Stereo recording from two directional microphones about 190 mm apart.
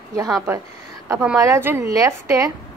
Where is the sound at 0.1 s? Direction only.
15° right (ahead or behind).